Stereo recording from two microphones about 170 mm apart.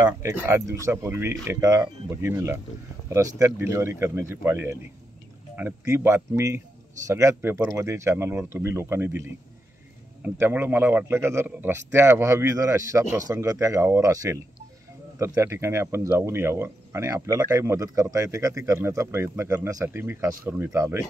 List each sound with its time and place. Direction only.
0.0 s speech: 15° right (ahead or behind)